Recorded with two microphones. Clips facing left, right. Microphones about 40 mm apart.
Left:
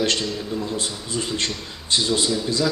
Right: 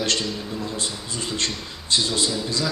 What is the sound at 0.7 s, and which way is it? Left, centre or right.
A man's voice, centre.